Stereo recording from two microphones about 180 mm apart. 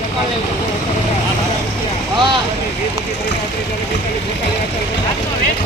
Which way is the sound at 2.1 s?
25° right (ahead or behind).